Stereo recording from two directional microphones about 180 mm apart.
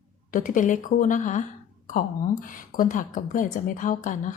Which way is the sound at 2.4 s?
50° left (ahead or behind).